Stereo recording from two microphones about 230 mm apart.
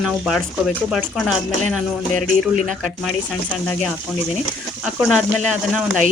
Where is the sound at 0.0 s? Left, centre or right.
Centre.